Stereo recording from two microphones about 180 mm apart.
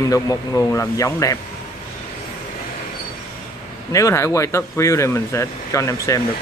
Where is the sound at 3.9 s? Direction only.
15° left (ahead or behind).